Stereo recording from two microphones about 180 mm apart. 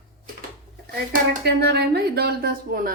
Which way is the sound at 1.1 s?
65° right (ahead or behind).